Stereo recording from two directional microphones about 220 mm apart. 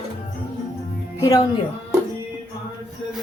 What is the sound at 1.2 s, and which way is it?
Speech, 15° left (ahead or behind).